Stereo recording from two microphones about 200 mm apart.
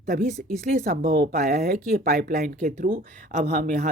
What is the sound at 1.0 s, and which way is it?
Speech, 50° right (ahead or behind).